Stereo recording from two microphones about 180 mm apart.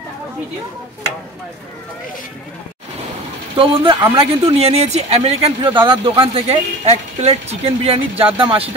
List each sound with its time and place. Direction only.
3.5 s speech: 25° right (ahead or behind)